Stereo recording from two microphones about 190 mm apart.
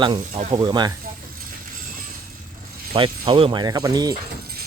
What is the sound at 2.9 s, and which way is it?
Speech, 25° right (ahead or behind).